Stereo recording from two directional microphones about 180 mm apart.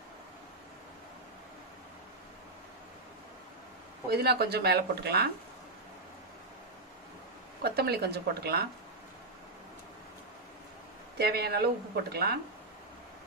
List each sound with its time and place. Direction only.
4.1 s speech: 60° right (ahead or behind)
7.6 s speech: 60° right (ahead or behind)
11.1 s speech: 60° right (ahead or behind)